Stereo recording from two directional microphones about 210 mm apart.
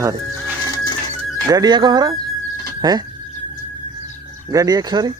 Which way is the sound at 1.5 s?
20° right (ahead or behind).